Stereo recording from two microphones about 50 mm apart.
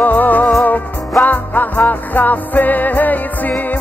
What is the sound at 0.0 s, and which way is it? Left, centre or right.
Music, left.